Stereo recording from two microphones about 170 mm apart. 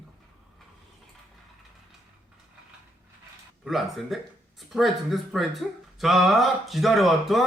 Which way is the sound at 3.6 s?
Centre (ahead or behind).